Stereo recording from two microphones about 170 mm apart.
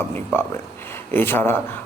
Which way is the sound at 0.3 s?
15° left (ahead or behind).